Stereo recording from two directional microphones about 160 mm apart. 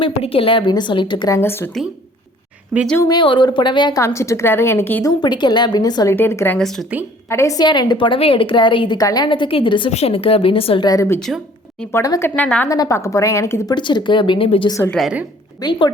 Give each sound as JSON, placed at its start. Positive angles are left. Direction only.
{"t": 0.0, "sound": "a woman's voice", "side_deg": 35}
{"t": 1.4, "sound": "a woman's voice", "side_deg": 15}
{"t": 3.0, "sound": "a woman's voice", "side_deg": 25}
{"t": 5.2, "sound": "a woman's voice", "side_deg": 30}
{"t": 6.6, "sound": "a woman's voice", "side_deg": 0}
{"t": 7.3, "sound": "a woman's voice", "side_deg": 20}
{"t": 10.8, "sound": "a woman's voice", "side_deg": 20}
{"t": 12.4, "sound": "a woman's voice", "side_deg": 10}
{"t": 12.7, "sound": "a woman's voice", "side_deg": 20}
{"t": 14.8, "sound": "a woman's voice", "side_deg": 0}
{"t": 15.6, "sound": "a woman's voice", "side_deg": 25}